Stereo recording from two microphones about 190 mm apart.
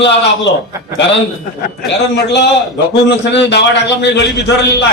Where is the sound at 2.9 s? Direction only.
65° left (ahead or behind).